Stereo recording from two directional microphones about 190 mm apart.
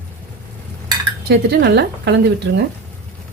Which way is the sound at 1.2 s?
55° right (ahead or behind).